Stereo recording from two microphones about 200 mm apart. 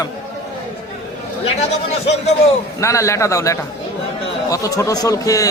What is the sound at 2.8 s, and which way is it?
A man's voice, 15° left (ahead or behind).